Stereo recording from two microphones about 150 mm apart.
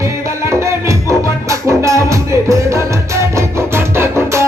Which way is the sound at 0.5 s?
20° right (ahead or behind).